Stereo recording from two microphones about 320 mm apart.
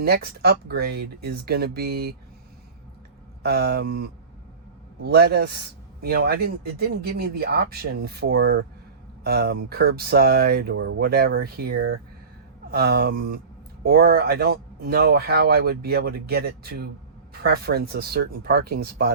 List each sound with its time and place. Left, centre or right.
0.0 s speech: right
3.4 s speech: right
5.0 s speech: right